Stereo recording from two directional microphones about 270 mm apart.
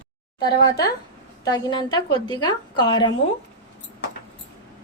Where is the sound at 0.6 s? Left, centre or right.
Centre.